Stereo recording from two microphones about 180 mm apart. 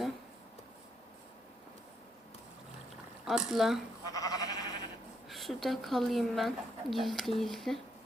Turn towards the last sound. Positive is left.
turn(degrees=0)  # may be behind; listen again after turning